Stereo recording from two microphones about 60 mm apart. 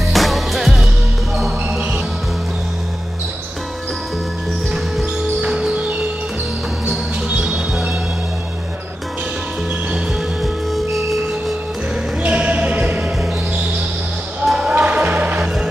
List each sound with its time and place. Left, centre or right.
0.1 s music: centre
5.4 s music: centre
7.2 s music: centre
10.4 s music: centre
12.2 s basketball bounce: right
14.4 s basketball bounce: centre
14.7 s music: centre
15.1 s music: right